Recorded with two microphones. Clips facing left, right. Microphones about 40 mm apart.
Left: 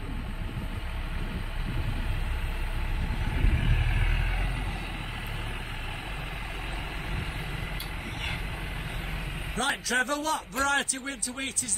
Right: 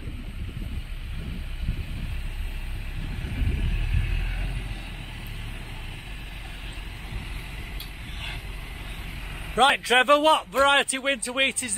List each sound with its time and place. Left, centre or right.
3.3 s vehicle: left
9.6 s a man's voice: right